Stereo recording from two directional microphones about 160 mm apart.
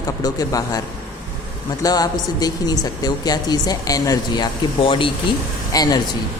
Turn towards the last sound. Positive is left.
turn(degrees=25)  # may be behind; listen again after turning